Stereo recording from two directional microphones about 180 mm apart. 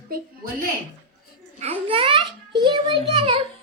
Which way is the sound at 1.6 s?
30° right (ahead or behind).